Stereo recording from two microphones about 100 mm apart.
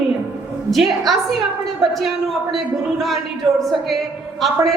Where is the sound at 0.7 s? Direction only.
Centre (ahead or behind).